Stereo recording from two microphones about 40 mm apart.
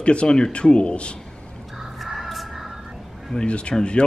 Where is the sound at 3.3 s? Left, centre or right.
Left.